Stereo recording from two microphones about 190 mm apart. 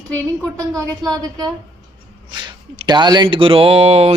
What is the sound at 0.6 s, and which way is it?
Speech, 20° right (ahead or behind).